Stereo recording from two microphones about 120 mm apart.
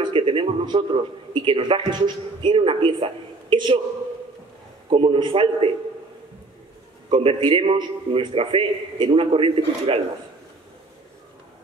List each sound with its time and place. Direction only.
0.0 s a man's voice: 45° right (ahead or behind)
4.8 s a man's voice: 50° right (ahead or behind)
7.1 s a man's voice: 45° right (ahead or behind)